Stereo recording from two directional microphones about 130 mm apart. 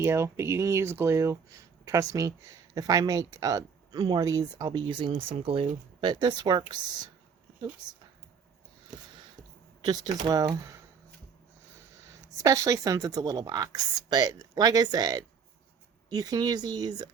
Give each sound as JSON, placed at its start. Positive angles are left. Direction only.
{"t": 0.0, "sound": "speech", "side_deg": -20}
{"t": 6.1, "sound": "speech", "side_deg": -35}
{"t": 9.8, "sound": "speech", "side_deg": -30}
{"t": 12.4, "sound": "speech", "side_deg": -25}